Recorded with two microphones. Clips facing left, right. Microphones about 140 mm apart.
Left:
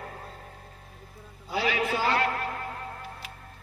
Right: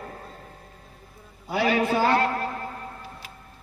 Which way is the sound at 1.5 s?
55° right (ahead or behind).